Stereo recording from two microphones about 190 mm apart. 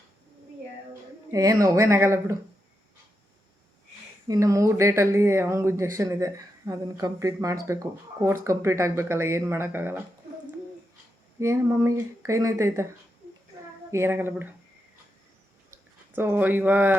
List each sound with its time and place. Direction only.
1.3 s speech: 20° right (ahead or behind)
4.3 s speech: 15° right (ahead or behind)
11.3 s speech: 15° right (ahead or behind)
13.9 s speech: 10° right (ahead or behind)
16.1 s speech: 10° right (ahead or behind)